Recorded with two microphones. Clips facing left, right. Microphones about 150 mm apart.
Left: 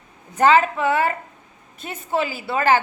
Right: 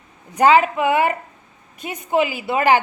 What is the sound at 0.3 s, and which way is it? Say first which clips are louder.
A woman's voice: right 2 dB; 10° right (ahead or behind).